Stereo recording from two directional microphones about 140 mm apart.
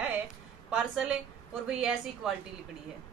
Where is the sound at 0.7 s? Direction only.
5° right (ahead or behind).